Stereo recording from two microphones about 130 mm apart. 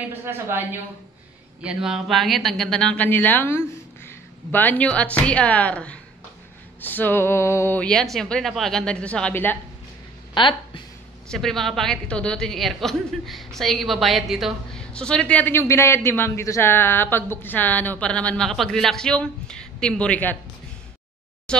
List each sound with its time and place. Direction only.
0.1 s a woman's voice: 15° right (ahead or behind)
1.6 s a woman's voice: 5° right (ahead or behind); by 9.6 s 15° left (ahead or behind)
10.3 s speech: 40° left (ahead or behind)
11.2 s a woman's voice: 5° left (ahead or behind)
21.5 s speech: 5° left (ahead or behind)